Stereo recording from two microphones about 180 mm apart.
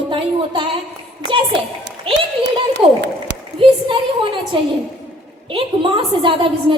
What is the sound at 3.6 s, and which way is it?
A woman's voice, 30° right (ahead or behind).